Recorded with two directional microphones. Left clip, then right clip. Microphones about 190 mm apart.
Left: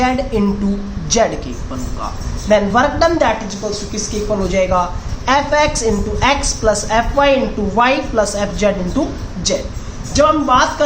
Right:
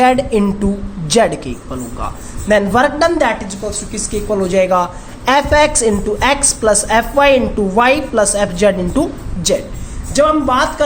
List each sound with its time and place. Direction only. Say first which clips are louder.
0.0 s a woman's voice: right 4 dB; 35° right (ahead or behind)
2.5 s a woman's voice: right 1 dB; 35° right (ahead or behind)